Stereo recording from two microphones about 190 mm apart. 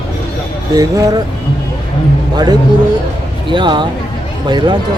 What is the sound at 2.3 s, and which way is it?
Speech, 20° right (ahead or behind).